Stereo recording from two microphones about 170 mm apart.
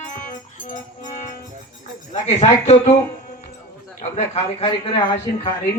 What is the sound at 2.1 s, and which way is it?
Speech, 40° left (ahead or behind).